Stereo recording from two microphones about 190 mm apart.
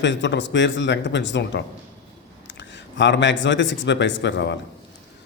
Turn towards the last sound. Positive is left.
turn(degrees=65)  # may be behind; listen again after turning